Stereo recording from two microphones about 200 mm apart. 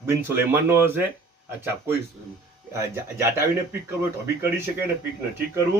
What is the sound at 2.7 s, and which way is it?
Speech, 15° right (ahead or behind).